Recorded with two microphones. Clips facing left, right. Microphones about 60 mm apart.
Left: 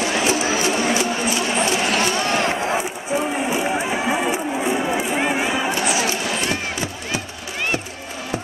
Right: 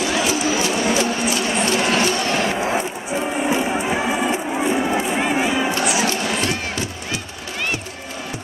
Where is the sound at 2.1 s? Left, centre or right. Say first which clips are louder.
Even; centre.